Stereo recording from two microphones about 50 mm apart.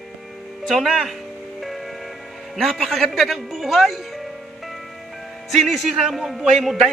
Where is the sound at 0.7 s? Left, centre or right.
Centre.